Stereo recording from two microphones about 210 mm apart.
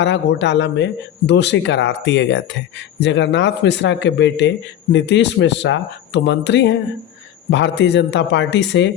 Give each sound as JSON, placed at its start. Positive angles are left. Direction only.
{"t": 0.0, "sound": "speech", "side_deg": 55}